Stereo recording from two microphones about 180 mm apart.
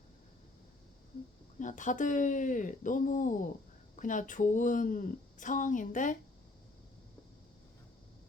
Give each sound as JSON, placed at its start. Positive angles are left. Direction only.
{"t": 1.5, "sound": "a woman's voice", "side_deg": 45}